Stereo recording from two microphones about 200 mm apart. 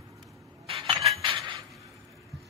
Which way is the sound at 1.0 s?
15° right (ahead or behind).